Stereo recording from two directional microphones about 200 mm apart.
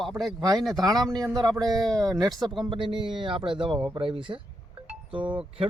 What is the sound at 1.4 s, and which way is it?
Speech, 20° right (ahead or behind).